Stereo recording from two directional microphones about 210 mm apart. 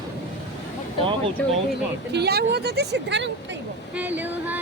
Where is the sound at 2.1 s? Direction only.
50° right (ahead or behind).